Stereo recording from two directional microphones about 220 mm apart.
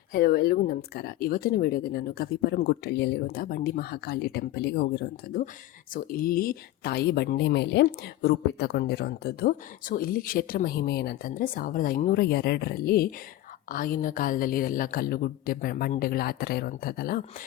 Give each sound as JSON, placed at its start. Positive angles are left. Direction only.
{"t": 0.1, "sound": "a woman's voice", "side_deg": 40}